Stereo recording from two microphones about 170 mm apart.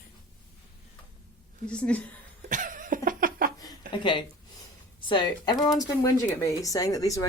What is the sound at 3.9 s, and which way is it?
Speech, 30° left (ahead or behind).